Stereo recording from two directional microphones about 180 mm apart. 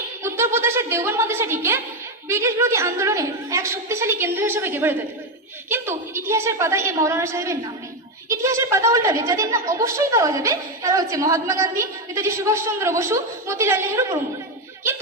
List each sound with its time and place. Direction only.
0.2 s a woman's voice: 15° right (ahead or behind)